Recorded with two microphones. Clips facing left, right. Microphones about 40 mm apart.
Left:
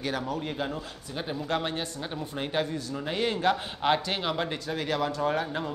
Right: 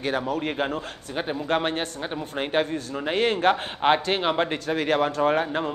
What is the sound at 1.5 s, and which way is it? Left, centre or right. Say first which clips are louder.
A man's voice: right 5 dB; right.